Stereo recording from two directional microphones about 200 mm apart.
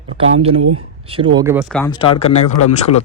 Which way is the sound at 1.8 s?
25° left (ahead or behind).